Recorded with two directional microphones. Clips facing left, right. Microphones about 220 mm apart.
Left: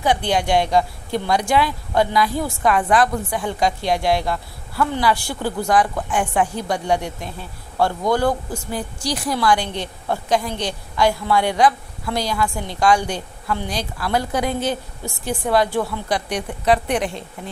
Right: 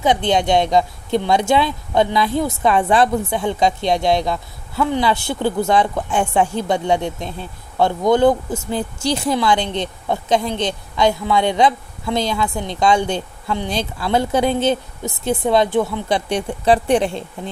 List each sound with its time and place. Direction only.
0.0 s speech: 20° right (ahead or behind)